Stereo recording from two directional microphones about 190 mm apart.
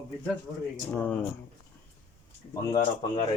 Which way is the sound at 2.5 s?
20° left (ahead or behind).